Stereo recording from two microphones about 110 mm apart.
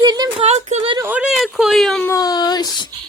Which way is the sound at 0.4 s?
80° right.